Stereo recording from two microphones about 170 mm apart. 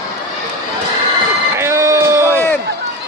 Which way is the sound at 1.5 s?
15° right (ahead or behind).